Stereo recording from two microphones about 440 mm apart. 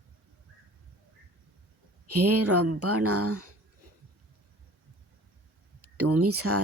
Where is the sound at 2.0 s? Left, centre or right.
Right.